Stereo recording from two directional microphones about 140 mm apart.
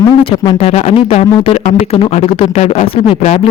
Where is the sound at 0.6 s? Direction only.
50° left (ahead or behind).